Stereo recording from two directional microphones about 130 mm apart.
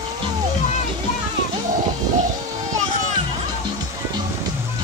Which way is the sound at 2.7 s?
70° right (ahead or behind).